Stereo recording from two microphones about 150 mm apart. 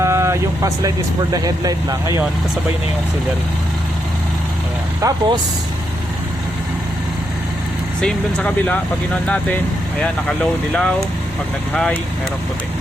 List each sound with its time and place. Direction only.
0.0 s speech: 20° right (ahead or behind)
4.9 s speech: 25° right (ahead or behind)
8.0 s speech: 5° left (ahead or behind)
10.0 s speech: 5° left (ahead or behind)